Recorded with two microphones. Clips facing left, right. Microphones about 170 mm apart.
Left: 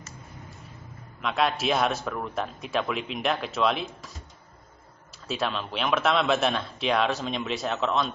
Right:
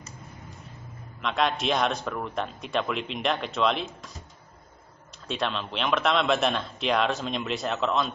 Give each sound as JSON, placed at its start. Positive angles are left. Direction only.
{"t": 1.2, "sound": "a man's voice", "side_deg": 5}
{"t": 5.3, "sound": "a man's voice", "side_deg": 0}